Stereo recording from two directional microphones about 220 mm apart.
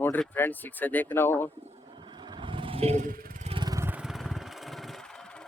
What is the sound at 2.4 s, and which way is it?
Vehicle, 25° right (ahead or behind).